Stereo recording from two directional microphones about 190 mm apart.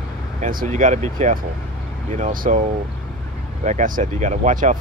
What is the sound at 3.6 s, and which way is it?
Speech, 40° right (ahead or behind).